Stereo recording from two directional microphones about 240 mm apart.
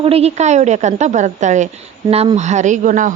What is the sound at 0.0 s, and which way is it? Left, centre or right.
A woman's voice, right.